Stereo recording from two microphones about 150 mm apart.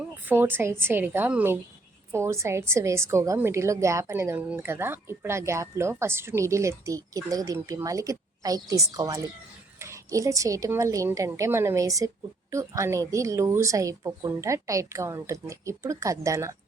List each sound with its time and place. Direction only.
0.3 s a woman's voice: 15° right (ahead or behind)